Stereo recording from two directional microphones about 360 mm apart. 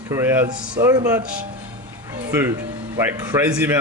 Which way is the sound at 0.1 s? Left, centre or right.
Centre.